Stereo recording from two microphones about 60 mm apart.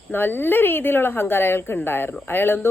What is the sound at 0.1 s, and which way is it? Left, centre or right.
A woman's voice, left.